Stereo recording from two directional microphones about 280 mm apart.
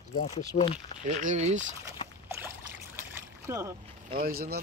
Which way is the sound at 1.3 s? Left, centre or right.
Right.